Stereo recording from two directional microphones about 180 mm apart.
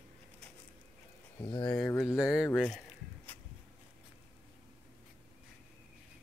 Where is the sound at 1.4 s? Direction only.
25° left (ahead or behind).